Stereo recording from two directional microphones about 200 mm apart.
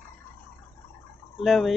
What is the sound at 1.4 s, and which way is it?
Speech, centre (ahead or behind).